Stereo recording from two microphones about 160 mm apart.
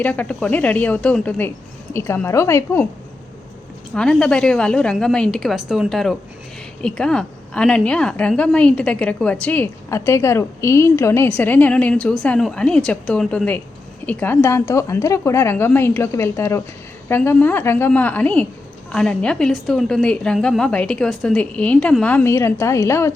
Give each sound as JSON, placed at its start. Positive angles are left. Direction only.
{"t": 0.0, "sound": "a woman's voice", "side_deg": 10}
{"t": 3.9, "sound": "a woman's voice", "side_deg": 5}